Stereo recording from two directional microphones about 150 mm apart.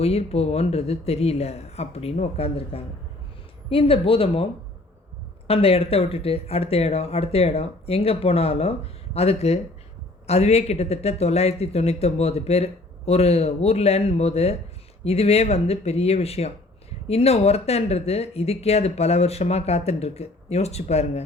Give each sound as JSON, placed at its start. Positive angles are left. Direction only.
{"t": 0.0, "sound": "speech", "side_deg": 40}
{"t": 5.5, "sound": "speech", "side_deg": 40}